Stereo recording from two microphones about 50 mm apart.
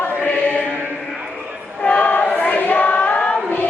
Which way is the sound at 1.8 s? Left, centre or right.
Left.